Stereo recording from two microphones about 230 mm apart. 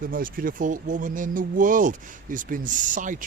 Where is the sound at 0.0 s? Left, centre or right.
Right.